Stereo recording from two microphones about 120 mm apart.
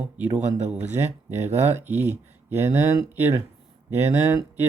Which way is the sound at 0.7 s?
15° right (ahead or behind).